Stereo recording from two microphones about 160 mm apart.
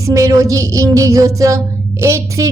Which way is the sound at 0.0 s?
20° right (ahead or behind).